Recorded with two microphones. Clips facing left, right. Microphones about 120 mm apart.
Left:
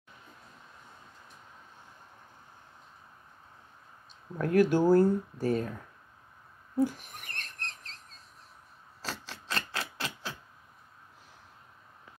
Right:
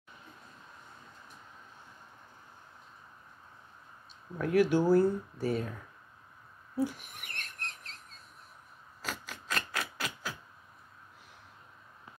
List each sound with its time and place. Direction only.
4.4 s speech: 45° left (ahead or behind)
6.8 s owl: 45° left (ahead or behind)
9.0 s rub: 35° left (ahead or behind)